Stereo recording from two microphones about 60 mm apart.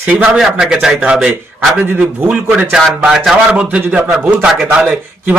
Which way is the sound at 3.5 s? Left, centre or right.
Right.